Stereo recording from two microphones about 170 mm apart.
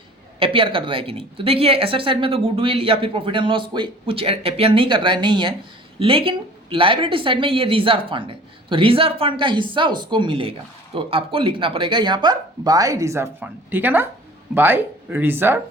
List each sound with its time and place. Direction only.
0.3 s a woman's voice: 30° right (ahead or behind); by 15.6 s 15° right (ahead or behind)